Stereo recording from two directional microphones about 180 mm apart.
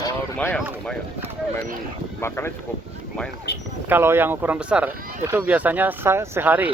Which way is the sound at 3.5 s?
65° left (ahead or behind).